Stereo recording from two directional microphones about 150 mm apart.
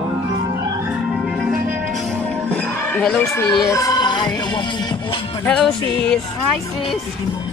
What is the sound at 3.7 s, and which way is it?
Music, 25° left (ahead or behind).